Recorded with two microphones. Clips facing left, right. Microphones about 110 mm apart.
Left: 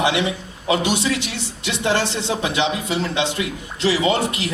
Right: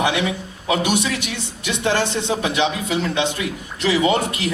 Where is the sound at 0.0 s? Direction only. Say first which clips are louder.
Even; 25° left (ahead or behind).